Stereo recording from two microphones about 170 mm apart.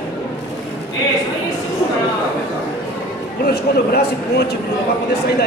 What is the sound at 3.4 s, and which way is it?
A man's voice, 70° left (ahead or behind).